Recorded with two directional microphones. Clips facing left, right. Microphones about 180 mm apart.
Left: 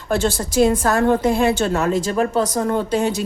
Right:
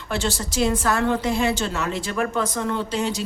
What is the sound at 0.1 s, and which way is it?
A woman's voice, 50° left (ahead or behind).